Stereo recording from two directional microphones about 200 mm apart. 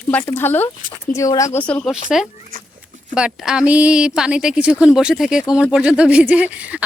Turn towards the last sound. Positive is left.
turn(degrees=-5)  # may be behind; listen again after turning